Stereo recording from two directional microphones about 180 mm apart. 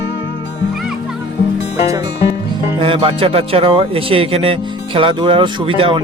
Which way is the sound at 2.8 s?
30° right (ahead or behind).